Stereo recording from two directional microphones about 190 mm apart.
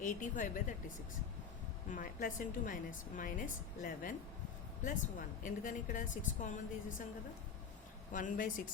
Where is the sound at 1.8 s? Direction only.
40° left (ahead or behind).